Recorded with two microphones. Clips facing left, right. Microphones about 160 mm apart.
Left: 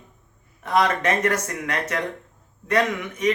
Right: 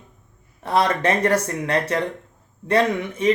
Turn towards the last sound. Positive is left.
turn(degrees=-30)  # may be behind; listen again after turning